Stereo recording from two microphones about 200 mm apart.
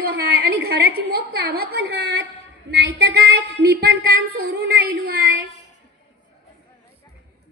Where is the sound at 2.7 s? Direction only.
55° right (ahead or behind).